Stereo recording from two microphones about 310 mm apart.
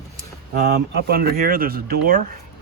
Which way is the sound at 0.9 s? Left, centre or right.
Right.